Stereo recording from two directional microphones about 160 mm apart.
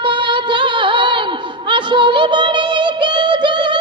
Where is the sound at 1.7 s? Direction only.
30° right (ahead or behind).